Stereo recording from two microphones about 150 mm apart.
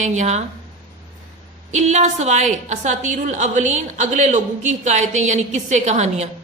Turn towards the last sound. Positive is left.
turn(degrees=-50)  # may be behind; listen again after turning